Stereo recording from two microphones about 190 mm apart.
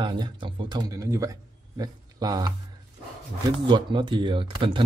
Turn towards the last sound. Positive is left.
turn(degrees=-25)  # may be behind; listen again after turning